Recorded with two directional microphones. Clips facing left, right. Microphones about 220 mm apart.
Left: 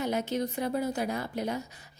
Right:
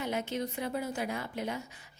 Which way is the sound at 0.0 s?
40° left (ahead or behind).